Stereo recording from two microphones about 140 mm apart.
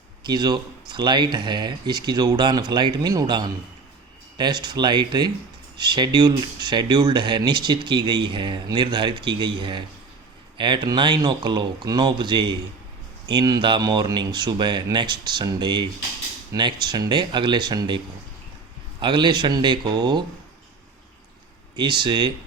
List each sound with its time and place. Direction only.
0.3 s speech: 30° right (ahead or behind)
19.0 s speech: 35° right (ahead or behind)
21.8 s speech: 35° right (ahead or behind)